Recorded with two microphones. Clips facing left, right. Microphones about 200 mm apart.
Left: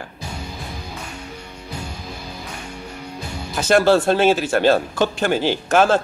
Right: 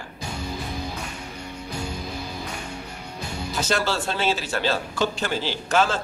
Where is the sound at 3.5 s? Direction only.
55° left (ahead or behind).